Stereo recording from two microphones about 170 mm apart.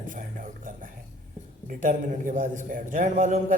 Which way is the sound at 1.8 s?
50° right (ahead or behind).